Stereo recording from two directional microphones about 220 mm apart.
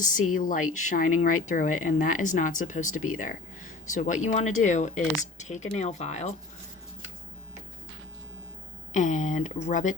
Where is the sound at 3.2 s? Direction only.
35° left (ahead or behind).